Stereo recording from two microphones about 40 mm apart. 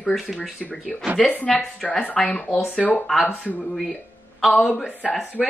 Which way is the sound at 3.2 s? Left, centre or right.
Left.